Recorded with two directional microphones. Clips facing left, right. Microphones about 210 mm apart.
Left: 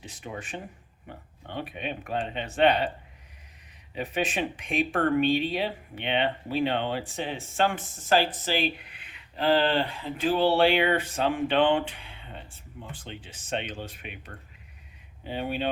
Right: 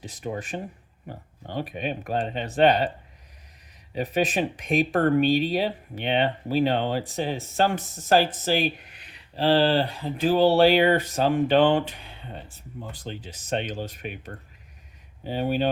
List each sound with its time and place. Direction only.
0.0 s speech: 40° right (ahead or behind)
3.9 s speech: 40° right (ahead or behind)